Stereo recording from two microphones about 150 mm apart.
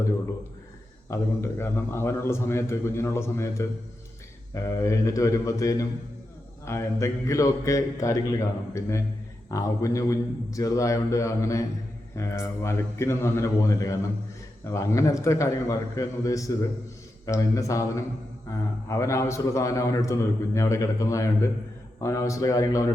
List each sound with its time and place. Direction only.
1.1 s a man's voice: 15° left (ahead or behind)